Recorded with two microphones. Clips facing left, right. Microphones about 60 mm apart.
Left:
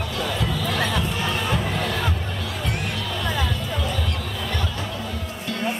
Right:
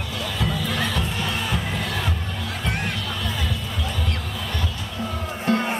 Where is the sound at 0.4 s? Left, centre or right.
Centre.